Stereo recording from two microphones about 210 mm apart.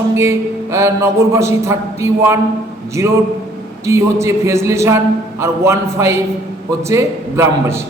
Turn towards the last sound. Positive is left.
turn(degrees=-15)  # may be behind; listen again after turning